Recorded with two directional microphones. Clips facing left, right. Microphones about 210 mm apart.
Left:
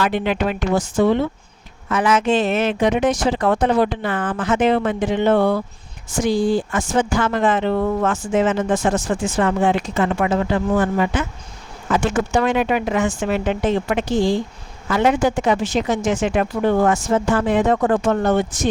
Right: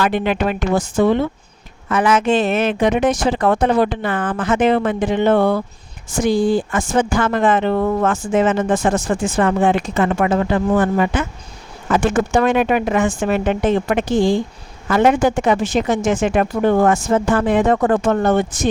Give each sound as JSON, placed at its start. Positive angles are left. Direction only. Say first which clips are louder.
{"t": 0.0, "sound": "speech", "louder": "right 2 dB", "side_deg": -55}